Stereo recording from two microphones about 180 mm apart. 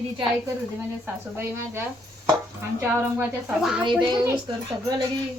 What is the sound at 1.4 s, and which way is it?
Speech, 10° right (ahead or behind).